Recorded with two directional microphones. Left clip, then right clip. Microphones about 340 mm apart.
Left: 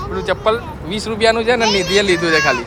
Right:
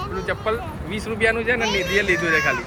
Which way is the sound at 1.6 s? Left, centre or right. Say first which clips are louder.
Left 6 dB; left.